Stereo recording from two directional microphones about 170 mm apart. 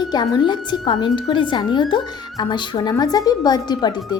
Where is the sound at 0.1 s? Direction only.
25° left (ahead or behind).